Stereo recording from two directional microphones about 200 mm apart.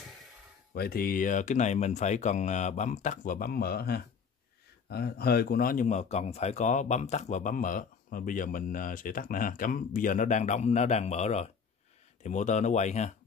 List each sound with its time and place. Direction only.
0.7 s speech: 45° left (ahead or behind)